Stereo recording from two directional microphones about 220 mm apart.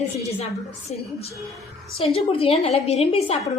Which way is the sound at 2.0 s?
25° left (ahead or behind).